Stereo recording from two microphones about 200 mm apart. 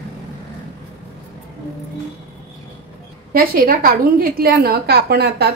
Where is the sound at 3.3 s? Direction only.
45° right (ahead or behind).